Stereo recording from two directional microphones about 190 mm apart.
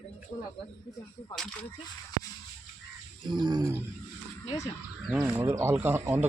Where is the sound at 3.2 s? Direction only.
20° right (ahead or behind).